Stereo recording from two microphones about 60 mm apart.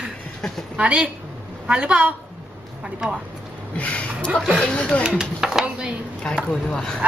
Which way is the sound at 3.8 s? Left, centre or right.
Left.